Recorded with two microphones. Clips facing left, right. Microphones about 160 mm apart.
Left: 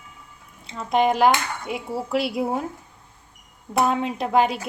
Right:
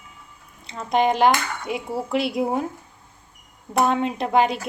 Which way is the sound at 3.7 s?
Centre (ahead or behind).